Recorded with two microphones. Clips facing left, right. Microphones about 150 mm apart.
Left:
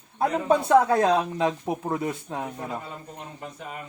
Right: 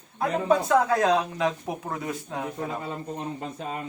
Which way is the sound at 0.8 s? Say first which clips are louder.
Left 2 dB; 25° left (ahead or behind).